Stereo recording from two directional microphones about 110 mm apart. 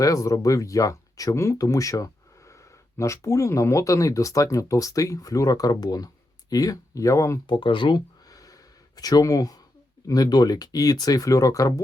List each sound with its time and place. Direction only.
0.0 s speech: 30° left (ahead or behind)
7.4 s speech: 45° left (ahead or behind); by 11.7 s 30° left (ahead or behind)